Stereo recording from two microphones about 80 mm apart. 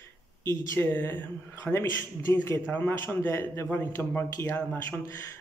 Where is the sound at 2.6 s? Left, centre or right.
Left.